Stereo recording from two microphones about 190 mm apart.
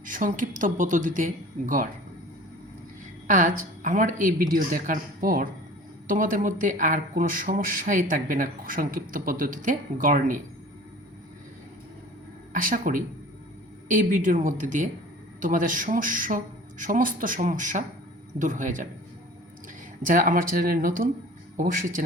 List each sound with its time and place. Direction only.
0.0 s a man's voice: 45° right (ahead or behind)
3.2 s a man's voice: 45° right (ahead or behind)
12.5 s a man's voice: 45° right (ahead or behind)
20.1 s a man's voice: 45° right (ahead or behind)